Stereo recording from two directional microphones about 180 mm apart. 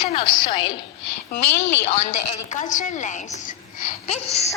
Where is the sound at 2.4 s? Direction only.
45° left (ahead or behind).